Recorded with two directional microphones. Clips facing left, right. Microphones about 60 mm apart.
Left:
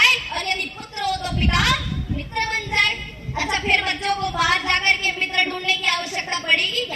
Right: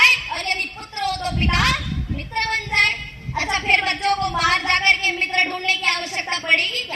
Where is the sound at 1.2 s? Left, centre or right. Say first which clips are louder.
Right 2 dB; right.